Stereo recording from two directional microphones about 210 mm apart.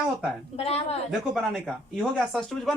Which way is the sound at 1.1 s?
Centre (ahead or behind).